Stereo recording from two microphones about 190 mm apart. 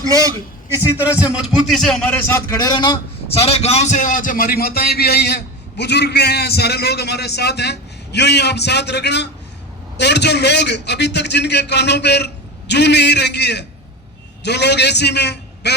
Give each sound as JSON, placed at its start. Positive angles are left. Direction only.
{"t": 0.0, "sound": "a man's voice", "side_deg": -20}
{"t": 2.6, "sound": "a man's voice", "side_deg": 20}